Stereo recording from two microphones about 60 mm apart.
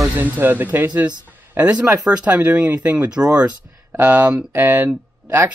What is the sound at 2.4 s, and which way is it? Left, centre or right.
Speech, right.